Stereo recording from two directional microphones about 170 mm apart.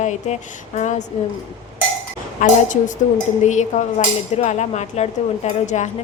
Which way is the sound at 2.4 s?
50° left (ahead or behind).